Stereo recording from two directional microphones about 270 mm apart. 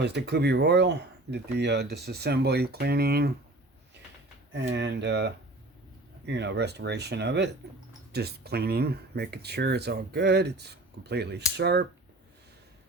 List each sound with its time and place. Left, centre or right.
0.0 s speech: right
4.5 s speech: right